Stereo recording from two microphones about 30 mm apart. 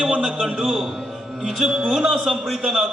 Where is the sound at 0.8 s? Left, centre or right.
Centre.